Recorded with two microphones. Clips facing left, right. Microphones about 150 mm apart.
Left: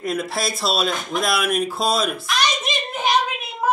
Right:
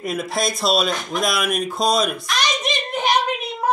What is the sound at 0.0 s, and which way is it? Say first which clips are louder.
Speech: right 1 dB; centre (ahead or behind).